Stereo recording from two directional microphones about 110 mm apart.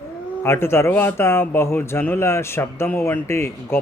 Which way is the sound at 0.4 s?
25° left (ahead or behind).